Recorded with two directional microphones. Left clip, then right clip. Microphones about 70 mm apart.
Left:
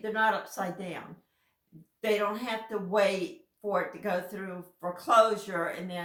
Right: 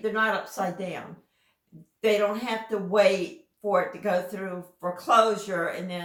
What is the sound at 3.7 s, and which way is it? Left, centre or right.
Speech, left.